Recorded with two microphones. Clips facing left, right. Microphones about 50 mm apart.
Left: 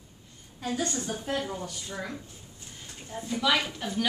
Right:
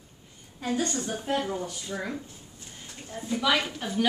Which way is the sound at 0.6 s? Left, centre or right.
Centre.